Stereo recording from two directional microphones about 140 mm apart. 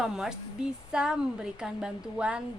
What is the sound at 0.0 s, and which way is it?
A woman's voice, 5° right (ahead or behind).